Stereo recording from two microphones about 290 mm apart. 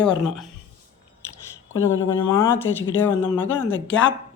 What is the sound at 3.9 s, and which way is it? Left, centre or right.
Speech, left.